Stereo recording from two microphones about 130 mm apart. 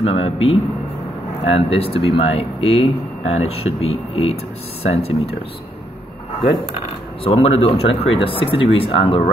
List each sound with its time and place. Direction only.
0.0 s speech: 50° left (ahead or behind)
7.2 s speech: 50° left (ahead or behind)